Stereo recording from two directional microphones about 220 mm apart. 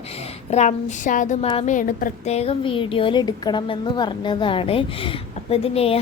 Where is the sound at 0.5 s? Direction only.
30° left (ahead or behind).